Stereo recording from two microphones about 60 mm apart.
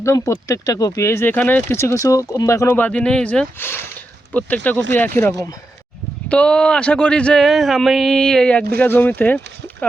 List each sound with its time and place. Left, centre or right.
0.0 s speech: left
1.3 s speech: left
1.7 s speech: left
2.7 s speech: left
3.0 s speech: centre
3.6 s speech: left
4.3 s speech: left
6.2 s speech: centre
7.4 s speech: centre
8.5 s speech: left